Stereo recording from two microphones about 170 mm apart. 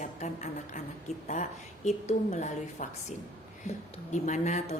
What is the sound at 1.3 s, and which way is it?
A woman's voice, 45° left (ahead or behind).